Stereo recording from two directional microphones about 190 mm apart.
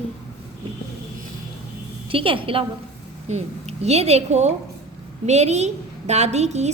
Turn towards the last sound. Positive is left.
turn(degrees=-35)  # may be behind; listen again after turning